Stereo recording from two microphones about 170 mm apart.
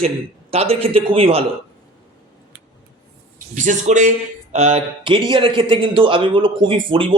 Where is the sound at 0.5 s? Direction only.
35° right (ahead or behind).